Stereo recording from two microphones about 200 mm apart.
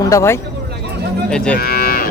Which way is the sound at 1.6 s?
50° left (ahead or behind).